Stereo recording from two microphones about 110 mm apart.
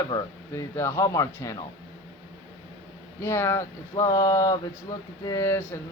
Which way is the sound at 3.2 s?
25° left (ahead or behind).